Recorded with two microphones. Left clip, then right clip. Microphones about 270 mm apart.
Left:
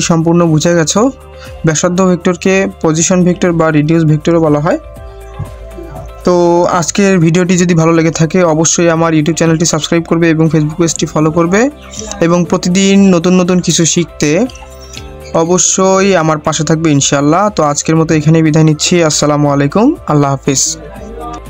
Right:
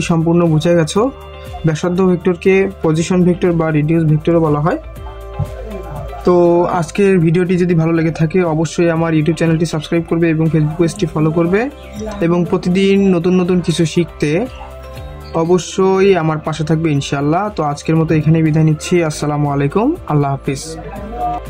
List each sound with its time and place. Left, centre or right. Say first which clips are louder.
0.0 s speech: left 4 dB; left
6.2 s speech: left 3 dB; left